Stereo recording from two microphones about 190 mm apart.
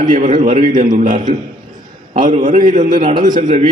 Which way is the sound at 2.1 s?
45° right (ahead or behind).